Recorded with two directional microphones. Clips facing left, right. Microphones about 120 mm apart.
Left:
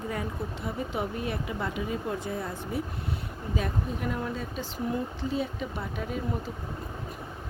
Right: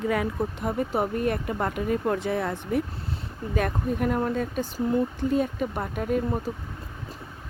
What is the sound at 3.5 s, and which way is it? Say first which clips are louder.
Speech: right 6 dB; 55° right (ahead or behind).